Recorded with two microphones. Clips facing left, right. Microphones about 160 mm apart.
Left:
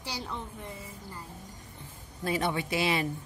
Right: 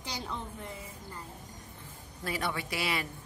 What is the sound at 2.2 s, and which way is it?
Speech, 25° left (ahead or behind).